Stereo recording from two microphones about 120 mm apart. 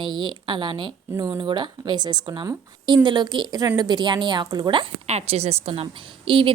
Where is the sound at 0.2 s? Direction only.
40° right (ahead or behind).